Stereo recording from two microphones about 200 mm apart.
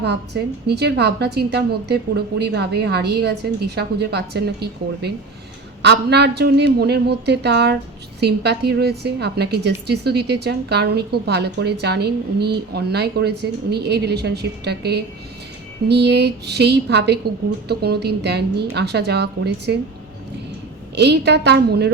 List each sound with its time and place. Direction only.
0.0 s a woman's voice: 55° right (ahead or behind)
20.9 s a woman's voice: 55° right (ahead or behind)